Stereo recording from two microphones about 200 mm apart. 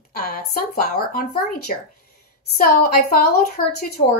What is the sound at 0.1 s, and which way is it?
A woman's voice, 45° left (ahead or behind).